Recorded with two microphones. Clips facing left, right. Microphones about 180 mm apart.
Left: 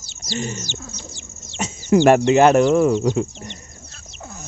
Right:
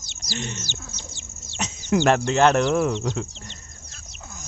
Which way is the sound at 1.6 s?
10° left (ahead or behind).